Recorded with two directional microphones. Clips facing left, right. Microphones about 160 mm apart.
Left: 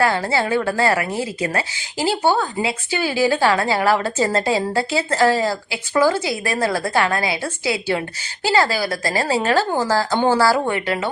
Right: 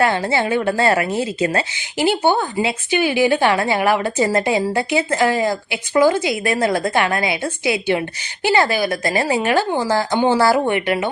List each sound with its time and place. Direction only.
0.0 s speech: 20° right (ahead or behind)